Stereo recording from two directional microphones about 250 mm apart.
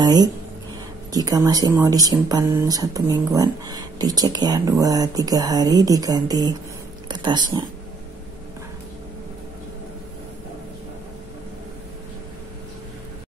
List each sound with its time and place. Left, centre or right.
0.0 s speech: centre